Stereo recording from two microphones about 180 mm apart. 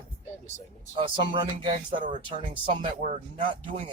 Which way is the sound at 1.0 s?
25° right (ahead or behind).